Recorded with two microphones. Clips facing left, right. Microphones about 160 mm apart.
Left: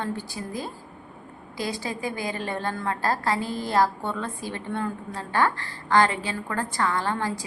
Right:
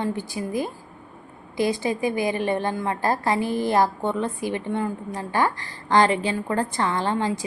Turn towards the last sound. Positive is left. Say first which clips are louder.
# right 4 dB
turn(degrees=-20)  # may be behind; listen again after turning